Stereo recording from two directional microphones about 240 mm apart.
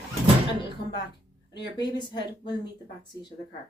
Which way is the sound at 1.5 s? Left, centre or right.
Centre.